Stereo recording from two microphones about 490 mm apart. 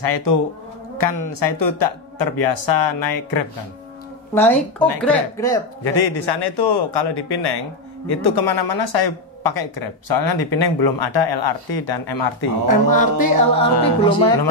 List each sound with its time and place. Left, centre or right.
0.0 s speech: left
4.3 s speech: centre
5.9 s speech: left
12.6 s music: centre